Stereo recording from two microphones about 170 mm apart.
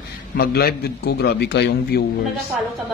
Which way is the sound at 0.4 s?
65° left (ahead or behind).